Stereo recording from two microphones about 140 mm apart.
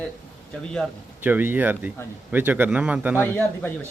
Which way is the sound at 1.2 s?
15° right (ahead or behind).